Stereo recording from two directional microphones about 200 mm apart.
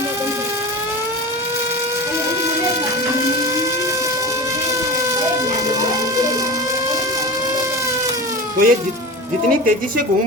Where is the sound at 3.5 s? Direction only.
15° right (ahead or behind).